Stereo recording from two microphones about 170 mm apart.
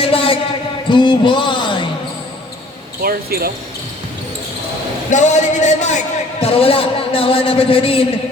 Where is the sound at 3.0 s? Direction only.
60° right (ahead or behind).